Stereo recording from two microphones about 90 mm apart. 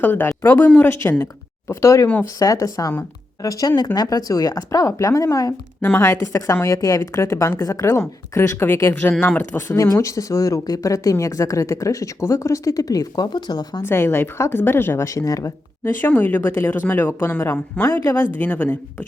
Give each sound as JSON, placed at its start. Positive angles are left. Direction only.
{"t": 0.0, "sound": "speech", "side_deg": 20}
{"t": 5.8, "sound": "speech", "side_deg": 25}
{"t": 6.1, "sound": "speech", "side_deg": 35}
{"t": 9.7, "sound": "speech", "side_deg": 35}
{"t": 13.8, "sound": "speech", "side_deg": 25}
{"t": 15.8, "sound": "speech", "side_deg": 20}